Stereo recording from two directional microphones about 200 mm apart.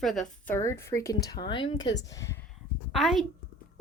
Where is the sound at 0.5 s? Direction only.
15° left (ahead or behind).